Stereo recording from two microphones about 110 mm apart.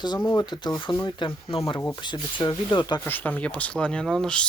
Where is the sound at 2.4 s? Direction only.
45° left (ahead or behind).